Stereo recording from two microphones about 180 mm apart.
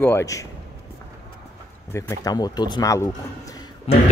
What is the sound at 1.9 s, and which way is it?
Speech, 15° left (ahead or behind).